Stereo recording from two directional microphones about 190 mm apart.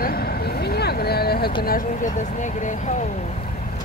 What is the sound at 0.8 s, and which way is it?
Vehicle, 55° left (ahead or behind).